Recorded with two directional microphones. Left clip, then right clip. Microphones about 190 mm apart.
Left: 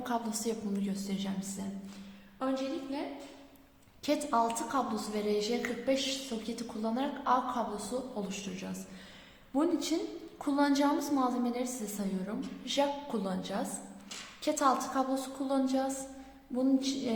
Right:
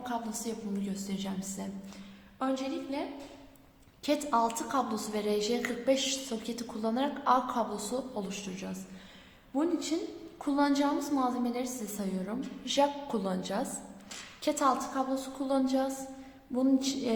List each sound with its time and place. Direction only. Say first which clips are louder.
0.0 s a woman's voice: left 2 dB; 20° left (ahead or behind)
1.0 s a woman's voice: even; centre (ahead or behind)
2.4 s a woman's voice: right 1 dB; 15° right (ahead or behind)
4.0 s a woman's voice: right 1 dB; centre (ahead or behind)